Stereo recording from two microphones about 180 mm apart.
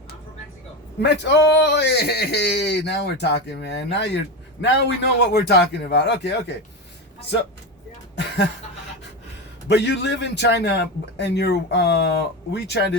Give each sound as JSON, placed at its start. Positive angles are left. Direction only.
{"t": 1.0, "sound": "a man's voice", "side_deg": 75}
{"t": 9.6, "sound": "a man's voice", "side_deg": 70}